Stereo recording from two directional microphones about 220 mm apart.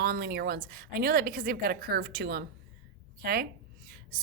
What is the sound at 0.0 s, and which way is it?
A woman's voice, 45° right (ahead or behind).